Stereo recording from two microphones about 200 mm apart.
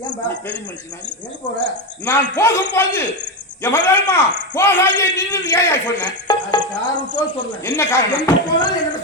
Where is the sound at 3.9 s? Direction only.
10° left (ahead or behind).